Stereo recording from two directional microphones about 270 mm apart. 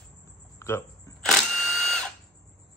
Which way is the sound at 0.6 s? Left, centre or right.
Centre.